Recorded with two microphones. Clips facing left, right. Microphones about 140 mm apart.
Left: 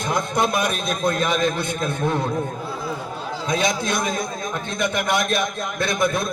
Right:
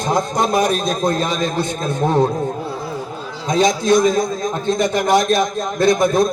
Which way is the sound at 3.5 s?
55° left (ahead or behind).